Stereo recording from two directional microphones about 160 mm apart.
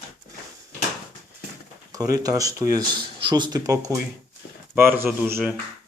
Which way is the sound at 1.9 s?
20° right (ahead or behind).